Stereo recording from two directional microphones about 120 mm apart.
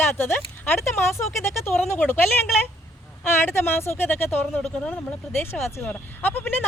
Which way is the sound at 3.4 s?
20° left (ahead or behind).